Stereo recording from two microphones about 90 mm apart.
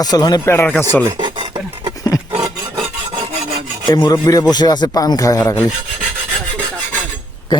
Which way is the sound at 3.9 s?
50° left (ahead or behind).